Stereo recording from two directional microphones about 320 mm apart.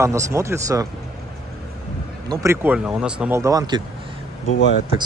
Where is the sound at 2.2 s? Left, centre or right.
Centre.